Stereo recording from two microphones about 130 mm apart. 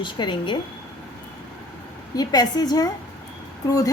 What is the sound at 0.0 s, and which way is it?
Speech, 35° left (ahead or behind).